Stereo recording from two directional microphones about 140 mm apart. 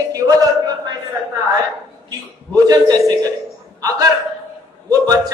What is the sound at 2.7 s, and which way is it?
Speech, 25° right (ahead or behind).